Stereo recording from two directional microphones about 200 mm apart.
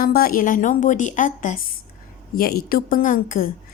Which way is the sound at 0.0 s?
45° left (ahead or behind).